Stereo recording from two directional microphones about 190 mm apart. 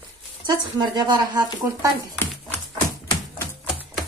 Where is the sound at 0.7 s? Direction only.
20° right (ahead or behind).